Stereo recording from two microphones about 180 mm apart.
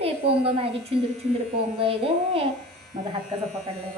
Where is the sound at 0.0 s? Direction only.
35° right (ahead or behind).